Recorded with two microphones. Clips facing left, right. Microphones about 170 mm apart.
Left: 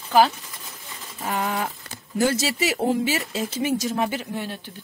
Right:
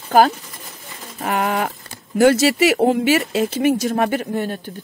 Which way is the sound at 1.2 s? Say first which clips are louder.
Right 5 dB; 80° right.